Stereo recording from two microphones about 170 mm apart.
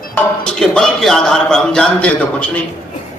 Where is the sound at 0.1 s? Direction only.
5° left (ahead or behind).